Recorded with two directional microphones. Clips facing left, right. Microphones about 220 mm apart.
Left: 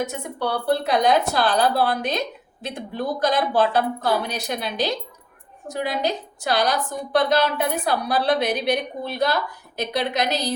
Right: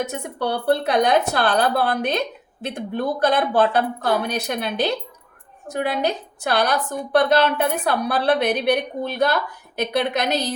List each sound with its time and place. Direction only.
0.3 s a woman's voice: 60° right (ahead or behind)